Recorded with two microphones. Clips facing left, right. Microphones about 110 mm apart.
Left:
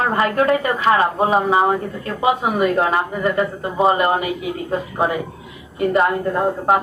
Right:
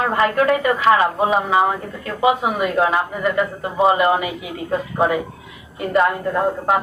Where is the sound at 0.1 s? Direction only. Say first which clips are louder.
Even; 35° left (ahead or behind).